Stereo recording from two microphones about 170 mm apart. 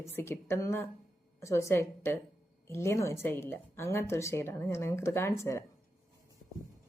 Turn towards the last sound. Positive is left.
turn(degrees=15)  # may be behind; listen again after turning